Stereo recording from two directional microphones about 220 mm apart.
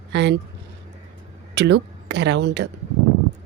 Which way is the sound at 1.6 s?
50° right (ahead or behind).